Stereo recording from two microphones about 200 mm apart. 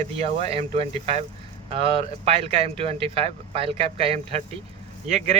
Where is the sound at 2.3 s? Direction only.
30° right (ahead or behind).